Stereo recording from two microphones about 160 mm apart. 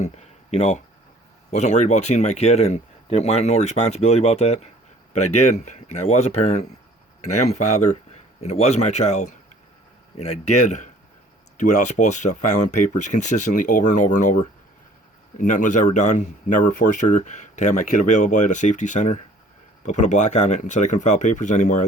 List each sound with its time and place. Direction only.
0.0 s speech: 45° left (ahead or behind)